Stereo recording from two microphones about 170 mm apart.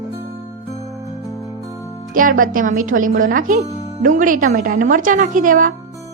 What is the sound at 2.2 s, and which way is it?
A woman's voice, 55° right (ahead or behind).